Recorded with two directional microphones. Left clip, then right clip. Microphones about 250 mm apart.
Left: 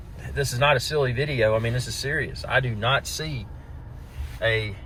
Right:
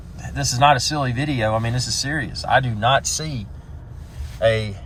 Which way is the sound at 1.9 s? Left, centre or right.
Centre.